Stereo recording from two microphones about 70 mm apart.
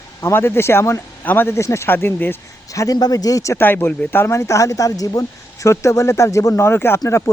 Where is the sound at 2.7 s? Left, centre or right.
Left.